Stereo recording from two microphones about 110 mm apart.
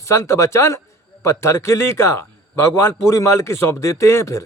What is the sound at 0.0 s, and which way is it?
A man's voice, 25° left (ahead or behind).